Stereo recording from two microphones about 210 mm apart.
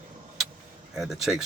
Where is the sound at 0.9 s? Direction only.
Centre (ahead or behind).